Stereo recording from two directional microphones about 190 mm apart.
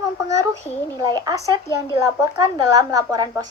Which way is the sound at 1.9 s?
15° right (ahead or behind).